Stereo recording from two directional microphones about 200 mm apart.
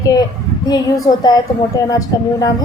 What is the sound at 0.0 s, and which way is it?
A woman's voice, 20° left (ahead or behind).